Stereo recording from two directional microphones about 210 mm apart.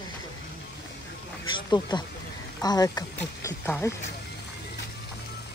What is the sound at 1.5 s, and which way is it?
Speech, 20° left (ahead or behind).